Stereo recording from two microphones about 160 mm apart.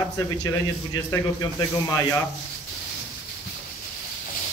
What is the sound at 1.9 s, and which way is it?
Speech, 20° left (ahead or behind).